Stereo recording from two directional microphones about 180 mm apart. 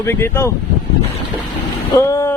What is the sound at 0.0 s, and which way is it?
Speech, 15° left (ahead or behind).